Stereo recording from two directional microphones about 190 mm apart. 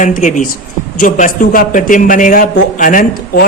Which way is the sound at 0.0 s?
40° left (ahead or behind).